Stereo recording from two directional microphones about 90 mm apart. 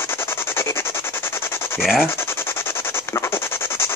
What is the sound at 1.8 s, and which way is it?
Speech, centre (ahead or behind).